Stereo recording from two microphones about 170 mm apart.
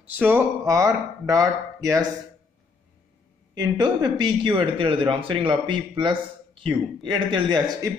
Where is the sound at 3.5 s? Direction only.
25° right (ahead or behind).